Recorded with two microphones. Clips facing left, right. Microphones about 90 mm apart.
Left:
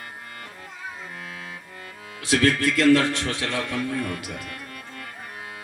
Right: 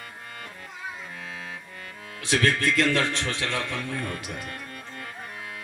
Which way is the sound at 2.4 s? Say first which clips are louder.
Left 5 dB; 25° right (ahead or behind).